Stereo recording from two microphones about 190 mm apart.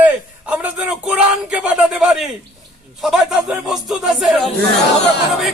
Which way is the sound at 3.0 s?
Centre (ahead or behind).